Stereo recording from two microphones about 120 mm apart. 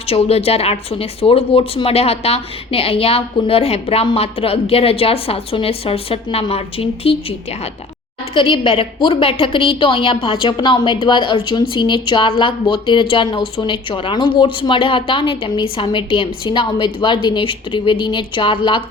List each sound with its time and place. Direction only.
0.1 s a woman's voice: 55° left (ahead or behind)